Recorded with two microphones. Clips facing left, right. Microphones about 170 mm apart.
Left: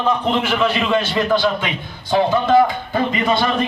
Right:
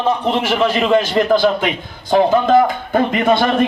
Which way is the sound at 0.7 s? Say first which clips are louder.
Right 4 dB; 45° right (ahead or behind).